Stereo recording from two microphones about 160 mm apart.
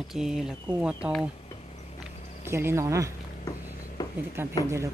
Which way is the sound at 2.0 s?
15° right (ahead or behind).